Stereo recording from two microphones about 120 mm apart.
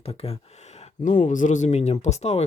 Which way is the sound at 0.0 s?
55° left (ahead or behind).